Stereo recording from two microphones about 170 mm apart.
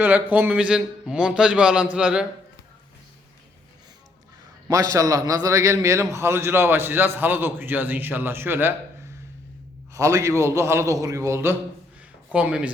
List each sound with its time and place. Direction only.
0.0 s a man's voice: 10° right (ahead or behind)
4.7 s a man's voice: 20° right (ahead or behind)
9.9 s a man's voice: 20° right (ahead or behind)